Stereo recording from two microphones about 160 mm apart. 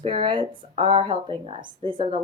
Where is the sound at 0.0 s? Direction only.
30° right (ahead or behind).